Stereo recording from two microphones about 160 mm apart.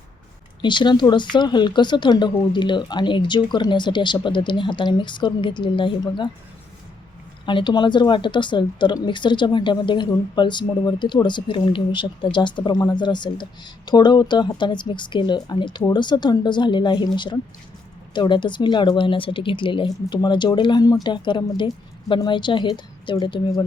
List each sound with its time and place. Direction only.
0.6 s speech: 30° left (ahead or behind)
7.4 s speech: 30° left (ahead or behind)